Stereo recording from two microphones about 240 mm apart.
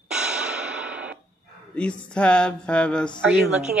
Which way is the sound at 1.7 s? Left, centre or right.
Centre.